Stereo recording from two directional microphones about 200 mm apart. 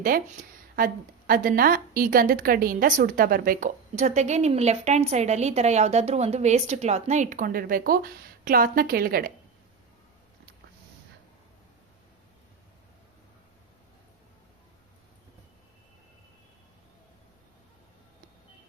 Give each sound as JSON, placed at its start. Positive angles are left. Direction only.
{"t": 1.3, "sound": "a woman's voice", "side_deg": -45}